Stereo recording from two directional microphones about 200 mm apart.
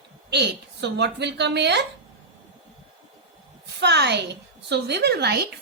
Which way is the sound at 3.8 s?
60° right (ahead or behind).